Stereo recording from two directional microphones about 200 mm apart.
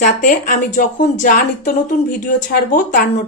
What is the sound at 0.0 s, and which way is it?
Speech, 40° left (ahead or behind).